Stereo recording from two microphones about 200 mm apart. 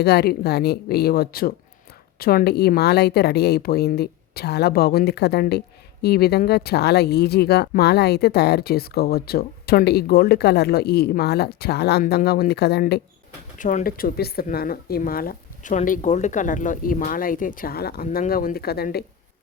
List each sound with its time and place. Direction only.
0.0 s a woman's voice: 55° left (ahead or behind)
13.6 s a woman's voice: 40° left (ahead or behind)